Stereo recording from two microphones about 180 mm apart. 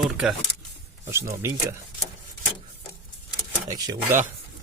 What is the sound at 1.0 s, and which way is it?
Speech, 15° right (ahead or behind).